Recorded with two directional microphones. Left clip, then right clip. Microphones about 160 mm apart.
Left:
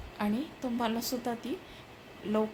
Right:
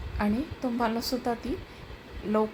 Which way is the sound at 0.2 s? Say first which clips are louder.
Right 4 dB; 15° right (ahead or behind).